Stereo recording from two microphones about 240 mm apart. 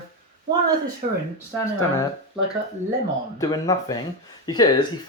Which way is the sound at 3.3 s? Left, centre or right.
Centre.